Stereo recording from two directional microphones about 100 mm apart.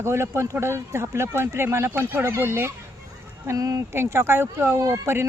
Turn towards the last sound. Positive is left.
turn(degrees=-25)  # may be behind; listen again after turning